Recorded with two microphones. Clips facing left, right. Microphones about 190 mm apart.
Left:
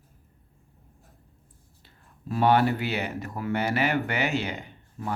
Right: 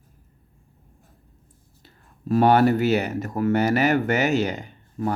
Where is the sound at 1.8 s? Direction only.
45° right (ahead or behind).